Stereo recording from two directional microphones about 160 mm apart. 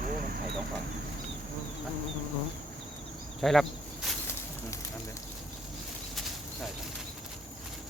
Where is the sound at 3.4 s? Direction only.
Centre (ahead or behind).